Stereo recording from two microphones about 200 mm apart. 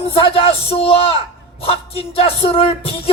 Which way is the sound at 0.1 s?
30° left (ahead or behind).